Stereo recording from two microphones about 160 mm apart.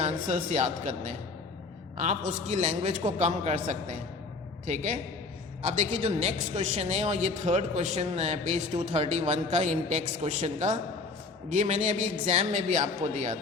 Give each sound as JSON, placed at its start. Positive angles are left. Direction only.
{"t": 0.0, "sound": "speech", "side_deg": -50}